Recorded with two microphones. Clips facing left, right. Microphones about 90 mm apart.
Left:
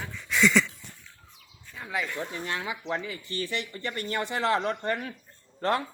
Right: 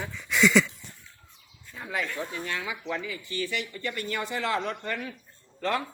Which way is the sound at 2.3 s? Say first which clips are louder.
Left 1 dB; 30° left (ahead or behind).